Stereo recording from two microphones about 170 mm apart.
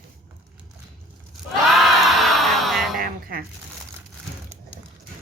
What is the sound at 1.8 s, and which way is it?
Music, centre (ahead or behind).